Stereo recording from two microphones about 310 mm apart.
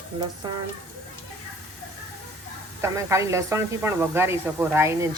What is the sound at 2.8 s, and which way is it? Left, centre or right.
Speech, centre.